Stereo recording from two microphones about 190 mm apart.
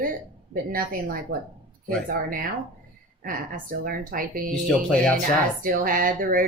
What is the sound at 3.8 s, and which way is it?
Speech, 50° right (ahead or behind).